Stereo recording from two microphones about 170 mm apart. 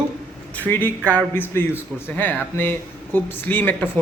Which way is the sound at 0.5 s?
10° left (ahead or behind).